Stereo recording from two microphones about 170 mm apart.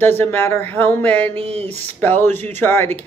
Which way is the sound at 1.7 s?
10° left (ahead or behind).